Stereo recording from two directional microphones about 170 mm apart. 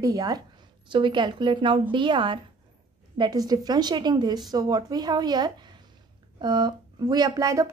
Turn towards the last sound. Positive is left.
turn(degrees=-20)  # may be behind; listen again after turning